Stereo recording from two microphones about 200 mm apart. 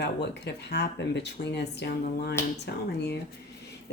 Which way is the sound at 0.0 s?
55° left (ahead or behind).